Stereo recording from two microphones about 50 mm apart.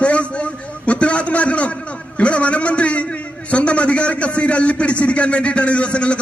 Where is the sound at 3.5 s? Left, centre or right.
Left.